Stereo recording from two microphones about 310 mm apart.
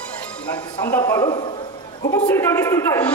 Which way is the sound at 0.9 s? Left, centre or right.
Centre.